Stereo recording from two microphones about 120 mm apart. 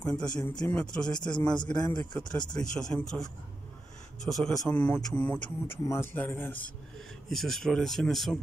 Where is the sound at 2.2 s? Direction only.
35° left (ahead or behind).